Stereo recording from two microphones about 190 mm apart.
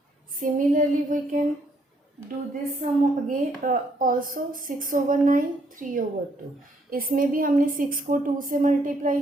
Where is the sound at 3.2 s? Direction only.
45° right (ahead or behind).